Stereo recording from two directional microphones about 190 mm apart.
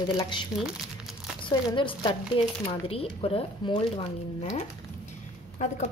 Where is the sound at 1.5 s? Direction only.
25° left (ahead or behind).